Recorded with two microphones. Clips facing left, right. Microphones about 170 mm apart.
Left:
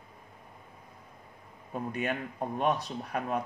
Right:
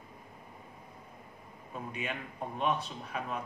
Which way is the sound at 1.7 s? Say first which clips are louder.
Left 6 dB; 60° left (ahead or behind).